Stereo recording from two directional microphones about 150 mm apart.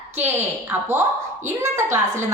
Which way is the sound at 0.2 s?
15° right (ahead or behind).